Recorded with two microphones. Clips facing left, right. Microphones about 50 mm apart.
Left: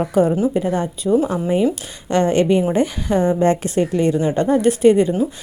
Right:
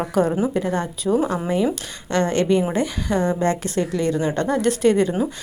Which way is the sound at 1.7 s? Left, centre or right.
Centre.